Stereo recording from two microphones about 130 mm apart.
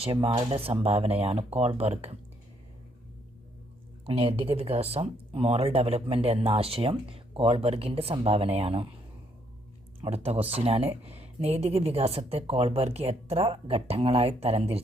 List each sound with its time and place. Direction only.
0.0 s speech: 45° right (ahead or behind)
4.0 s speech: 45° right (ahead or behind)
10.0 s speech: 50° right (ahead or behind)